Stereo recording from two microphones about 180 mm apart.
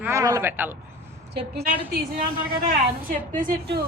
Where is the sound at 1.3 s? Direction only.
65° right (ahead or behind).